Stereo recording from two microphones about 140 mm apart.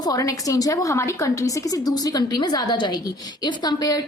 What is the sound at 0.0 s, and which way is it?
A woman's voice, 25° left (ahead or behind).